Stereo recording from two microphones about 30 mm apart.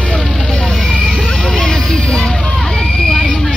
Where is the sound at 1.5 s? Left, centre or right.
Left.